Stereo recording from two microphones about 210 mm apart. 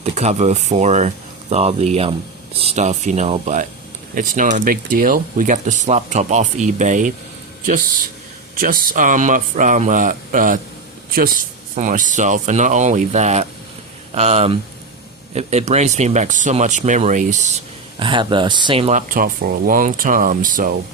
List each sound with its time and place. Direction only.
0.0 s speech: 30° right (ahead or behind)
18.0 s speech: 25° right (ahead or behind); by 20.7 s 40° right (ahead or behind)